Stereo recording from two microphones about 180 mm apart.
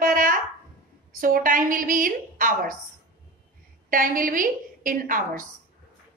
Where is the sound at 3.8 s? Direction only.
50° right (ahead or behind).